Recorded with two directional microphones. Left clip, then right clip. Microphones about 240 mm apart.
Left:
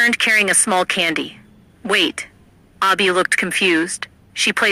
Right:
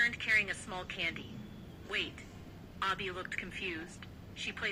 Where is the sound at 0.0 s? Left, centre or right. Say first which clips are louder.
Left 16 dB; left.